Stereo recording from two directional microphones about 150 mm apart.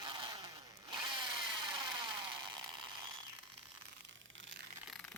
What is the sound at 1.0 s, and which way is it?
Chainsaw, 30° right (ahead or behind).